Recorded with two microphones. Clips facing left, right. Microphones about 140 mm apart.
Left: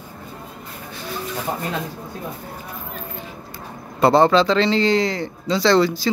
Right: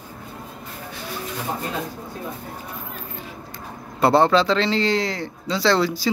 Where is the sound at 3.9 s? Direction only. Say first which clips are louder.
Left 2 dB; 5° right (ahead or behind).